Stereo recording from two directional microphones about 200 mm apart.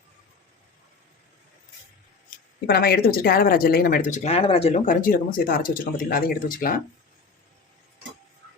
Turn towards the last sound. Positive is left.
turn(degrees=45)  # may be behind; listen again after turning